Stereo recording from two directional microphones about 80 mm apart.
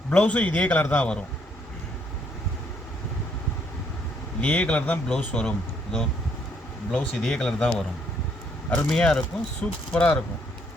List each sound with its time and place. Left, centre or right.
0.1 s speech: centre
4.4 s speech: centre
8.9 s speech: centre